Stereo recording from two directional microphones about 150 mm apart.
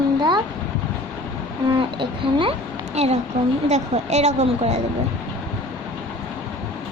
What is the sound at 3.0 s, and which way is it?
Child singing, 45° right (ahead or behind).